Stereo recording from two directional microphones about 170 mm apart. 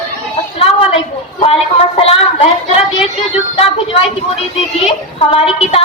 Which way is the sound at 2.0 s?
35° left (ahead or behind).